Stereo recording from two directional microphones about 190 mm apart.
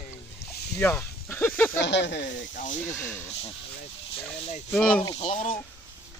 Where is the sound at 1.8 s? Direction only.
65° left (ahead or behind).